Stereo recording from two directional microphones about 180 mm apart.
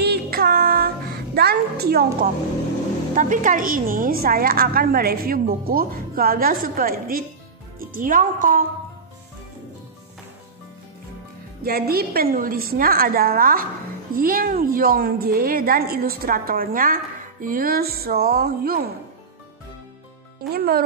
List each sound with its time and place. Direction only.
0.0 s music: 60° right (ahead or behind)
3.2 s a woman's voice: 45° right (ahead or behind)
11.6 s a woman's voice: 60° right (ahead or behind)
20.5 s a woman's voice: 60° right (ahead or behind)